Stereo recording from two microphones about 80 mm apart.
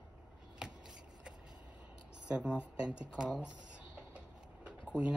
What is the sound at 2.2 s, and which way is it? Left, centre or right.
Speech, centre.